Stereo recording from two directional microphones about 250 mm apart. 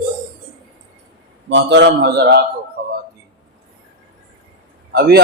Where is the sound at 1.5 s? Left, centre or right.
Right.